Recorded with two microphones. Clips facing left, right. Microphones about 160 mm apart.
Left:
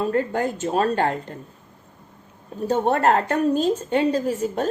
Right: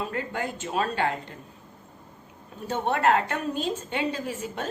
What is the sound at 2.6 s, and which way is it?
Speech, 40° left (ahead or behind).